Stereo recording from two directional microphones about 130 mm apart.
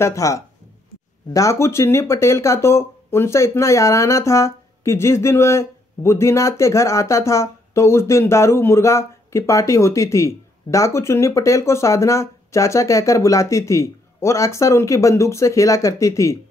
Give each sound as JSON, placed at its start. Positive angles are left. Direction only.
{"t": 0.0, "sound": "speech", "side_deg": 25}